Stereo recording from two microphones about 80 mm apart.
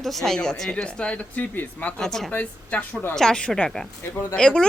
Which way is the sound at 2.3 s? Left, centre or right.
Centre.